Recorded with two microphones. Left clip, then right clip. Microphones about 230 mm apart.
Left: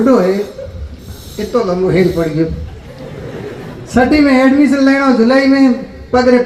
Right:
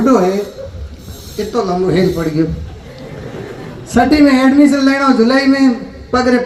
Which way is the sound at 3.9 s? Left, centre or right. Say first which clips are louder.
Even; right.